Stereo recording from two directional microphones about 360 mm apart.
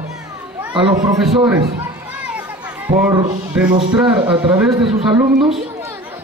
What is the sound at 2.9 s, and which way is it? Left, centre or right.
A woman's voice, centre.